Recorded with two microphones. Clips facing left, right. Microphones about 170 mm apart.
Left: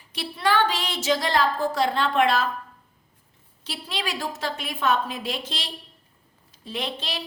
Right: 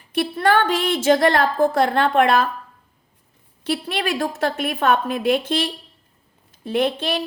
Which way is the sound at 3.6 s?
55° right (ahead or behind).